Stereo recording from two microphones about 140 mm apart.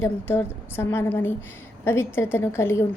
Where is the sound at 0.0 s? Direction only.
15° left (ahead or behind).